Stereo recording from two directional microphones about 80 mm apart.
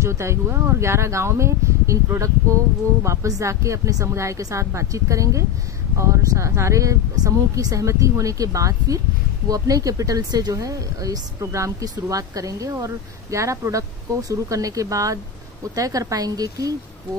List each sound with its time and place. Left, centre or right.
0.0 s speech: right